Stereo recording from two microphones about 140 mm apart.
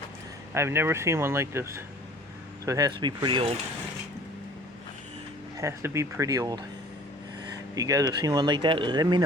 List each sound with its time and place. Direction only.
0.5 s speech: 20° right (ahead or behind); by 3.5 s 35° right (ahead or behind)
5.5 s speech: 20° right (ahead or behind)